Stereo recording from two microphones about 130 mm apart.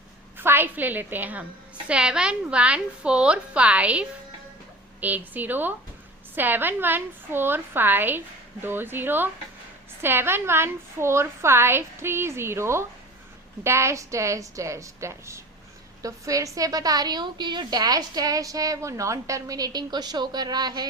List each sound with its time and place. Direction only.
0.3 s a woman's voice: 15° right (ahead or behind); by 20.8 s 30° right (ahead or behind)